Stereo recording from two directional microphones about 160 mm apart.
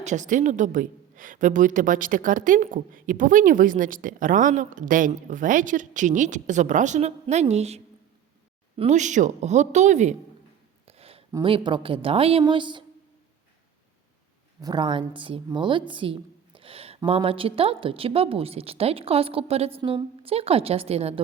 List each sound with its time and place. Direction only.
0.0 s a woman's voice: 50° right (ahead or behind)
10.8 s a sound: 40° right (ahead or behind)
11.4 s a woman's voice: 30° right (ahead or behind)
14.6 s a woman's voice: 25° right (ahead or behind)